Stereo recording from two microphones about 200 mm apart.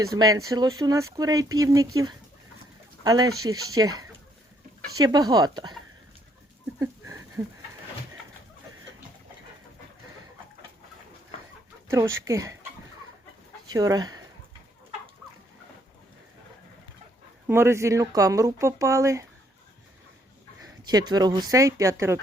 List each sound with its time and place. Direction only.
0.1 s speech: 15° right (ahead or behind)
3.0 s speech: 20° right (ahead or behind)
6.7 s a sound: 15° right (ahead or behind)
11.9 s speech: 15° right (ahead or behind)
13.7 s speech: 20° right (ahead or behind)
17.4 s speech: 10° right (ahead or behind)
20.6 s speech: 20° right (ahead or behind)